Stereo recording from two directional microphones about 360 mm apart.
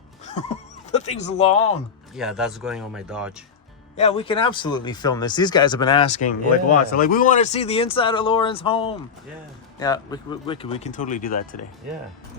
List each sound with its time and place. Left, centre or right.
0.3 s a sound: centre
2.1 s speech: centre
3.9 s speech: centre